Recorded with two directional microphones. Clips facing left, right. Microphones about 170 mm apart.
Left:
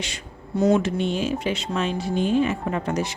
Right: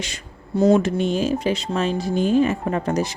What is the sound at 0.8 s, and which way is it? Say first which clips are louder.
A woman's voice: right 3 dB; 45° right (ahead or behind).